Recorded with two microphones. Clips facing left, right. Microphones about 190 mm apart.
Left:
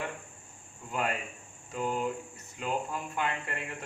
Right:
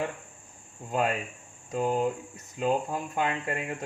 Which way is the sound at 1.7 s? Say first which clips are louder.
Right 5 dB; 40° right (ahead or behind).